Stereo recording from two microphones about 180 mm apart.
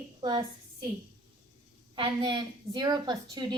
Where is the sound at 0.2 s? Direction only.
25° right (ahead or behind).